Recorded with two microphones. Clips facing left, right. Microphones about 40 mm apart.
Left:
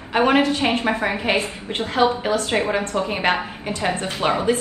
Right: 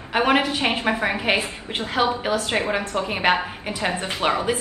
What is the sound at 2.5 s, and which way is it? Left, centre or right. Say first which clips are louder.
Speech: left 2 dB; right.